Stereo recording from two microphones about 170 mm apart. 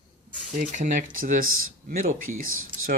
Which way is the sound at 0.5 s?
50° right (ahead or behind).